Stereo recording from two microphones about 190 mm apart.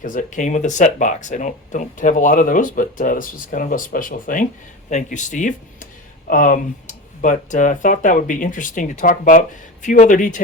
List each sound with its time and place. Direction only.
0.0 s speech: 45° left (ahead or behind)